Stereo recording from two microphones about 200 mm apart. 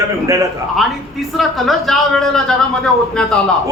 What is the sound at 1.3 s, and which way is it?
A man's voice, centre (ahead or behind).